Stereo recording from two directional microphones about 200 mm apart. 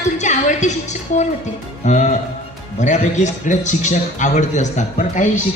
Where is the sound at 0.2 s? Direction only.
35° left (ahead or behind).